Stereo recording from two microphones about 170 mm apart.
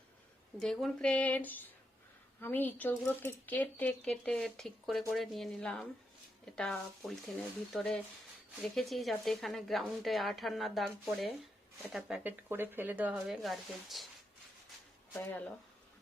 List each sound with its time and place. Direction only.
0.6 s speech: 5° left (ahead or behind)
15.2 s speech: 10° left (ahead or behind)